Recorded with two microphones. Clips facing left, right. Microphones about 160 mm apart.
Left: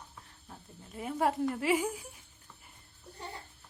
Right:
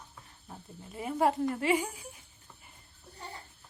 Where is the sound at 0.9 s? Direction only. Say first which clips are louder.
Right 2 dB; centre (ahead or behind).